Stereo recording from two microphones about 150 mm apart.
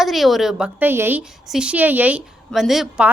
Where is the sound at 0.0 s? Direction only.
Centre (ahead or behind).